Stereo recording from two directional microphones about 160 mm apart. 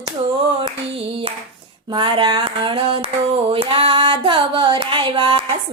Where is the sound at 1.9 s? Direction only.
30° right (ahead or behind).